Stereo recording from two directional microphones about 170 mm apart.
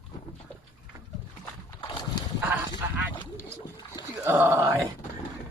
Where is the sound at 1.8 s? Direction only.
25° left (ahead or behind).